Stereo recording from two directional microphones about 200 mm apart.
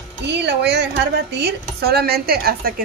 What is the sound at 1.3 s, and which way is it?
Speech, 55° right (ahead or behind).